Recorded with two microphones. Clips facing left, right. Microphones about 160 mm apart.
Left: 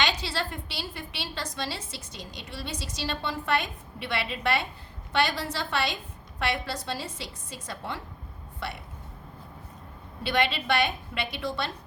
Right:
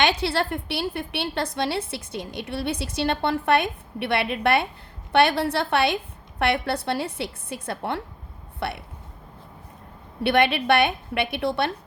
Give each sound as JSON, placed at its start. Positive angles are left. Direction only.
{"t": 0.0, "sound": "a woman's voice", "side_deg": -60}
{"t": 10.2, "sound": "a woman's voice", "side_deg": -60}